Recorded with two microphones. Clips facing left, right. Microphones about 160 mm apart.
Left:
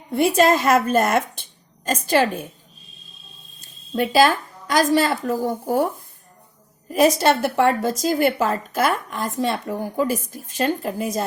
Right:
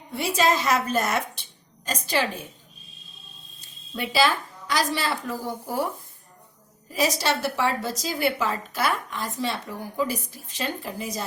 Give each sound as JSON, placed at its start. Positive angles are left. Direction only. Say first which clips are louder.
{"t": 0.1, "sound": "a woman's voice", "louder": "left 7 dB", "side_deg": 50}
{"t": 3.6, "sound": "a woman's voice", "louder": "left 9 dB", "side_deg": 45}
{"t": 6.9, "sound": "a woman's voice", "louder": "left 8 dB", "side_deg": 55}